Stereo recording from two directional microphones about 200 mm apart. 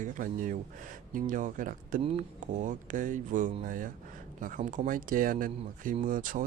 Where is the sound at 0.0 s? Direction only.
40° right (ahead or behind).